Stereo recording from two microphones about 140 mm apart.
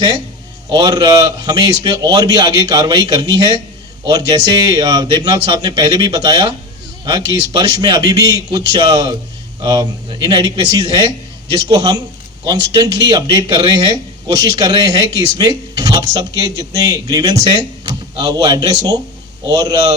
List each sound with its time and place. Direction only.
0.7 s speech: 30° right (ahead or behind)